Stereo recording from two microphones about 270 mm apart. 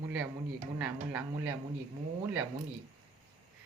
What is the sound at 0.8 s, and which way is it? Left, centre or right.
Speech, centre.